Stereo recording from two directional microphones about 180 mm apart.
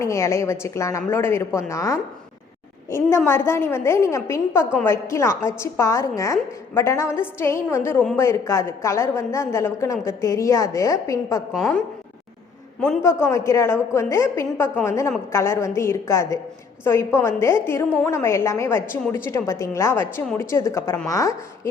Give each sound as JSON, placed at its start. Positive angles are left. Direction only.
{"t": 0.0, "sound": "a woman's voice", "side_deg": 15}
{"t": 3.2, "sound": "a woman's voice", "side_deg": 15}
{"t": 11.5, "sound": "a woman's voice", "side_deg": 0}
{"t": 13.0, "sound": "a woman's voice", "side_deg": 15}